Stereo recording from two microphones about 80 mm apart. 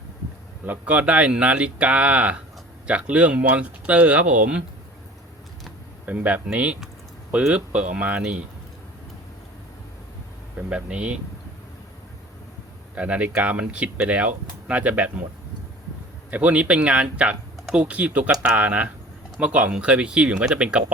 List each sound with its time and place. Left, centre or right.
0.6 s speech: right
6.1 s speech: centre
10.7 s speech: centre
13.0 s speech: centre
16.3 s speech: centre